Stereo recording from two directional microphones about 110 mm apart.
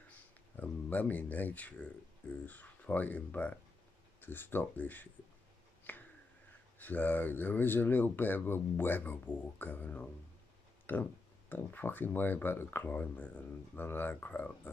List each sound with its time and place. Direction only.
0.6 s speech: 15° left (ahead or behind)
5.9 s a sound: 15° left (ahead or behind)
6.8 s speech: 15° left (ahead or behind)